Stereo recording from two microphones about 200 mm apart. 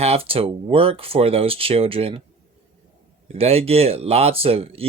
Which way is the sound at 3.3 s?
30° right (ahead or behind).